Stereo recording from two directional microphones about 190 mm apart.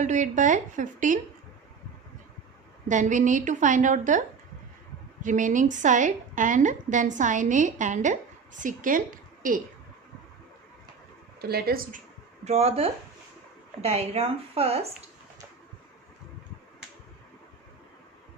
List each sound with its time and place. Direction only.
0.0 s a woman's voice: 40° right (ahead or behind)
2.8 s a woman's voice: 40° right (ahead or behind)
5.2 s a woman's voice: 40° right (ahead or behind)
11.3 s speech: 55° right (ahead or behind)
12.5 s a woman's voice: 35° right (ahead or behind)